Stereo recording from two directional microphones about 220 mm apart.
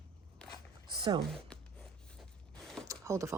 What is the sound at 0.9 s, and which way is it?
Speech, 20° right (ahead or behind).